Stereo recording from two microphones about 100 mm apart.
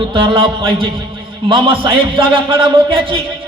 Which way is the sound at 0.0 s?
60° right (ahead or behind).